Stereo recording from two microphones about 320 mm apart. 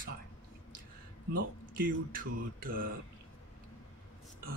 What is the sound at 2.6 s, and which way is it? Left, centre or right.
Speech, right.